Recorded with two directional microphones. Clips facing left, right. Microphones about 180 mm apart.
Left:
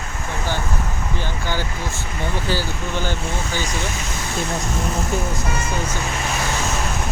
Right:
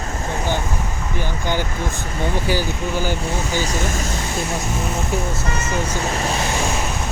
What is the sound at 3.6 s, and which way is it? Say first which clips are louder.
Speech: right 3 dB; 40° right (ahead or behind).